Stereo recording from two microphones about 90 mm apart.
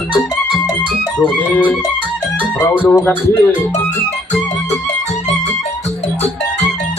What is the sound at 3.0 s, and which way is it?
Music, 25° left (ahead or behind).